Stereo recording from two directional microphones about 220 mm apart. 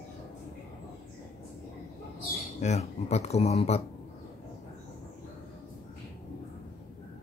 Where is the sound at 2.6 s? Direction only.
30° left (ahead or behind).